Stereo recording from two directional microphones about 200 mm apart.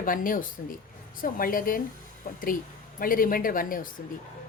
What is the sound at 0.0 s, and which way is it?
Speech, 45° left (ahead or behind).